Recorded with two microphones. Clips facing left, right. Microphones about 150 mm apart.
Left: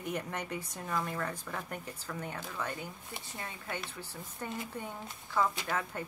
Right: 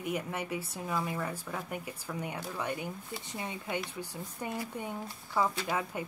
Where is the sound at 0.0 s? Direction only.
5° right (ahead or behind).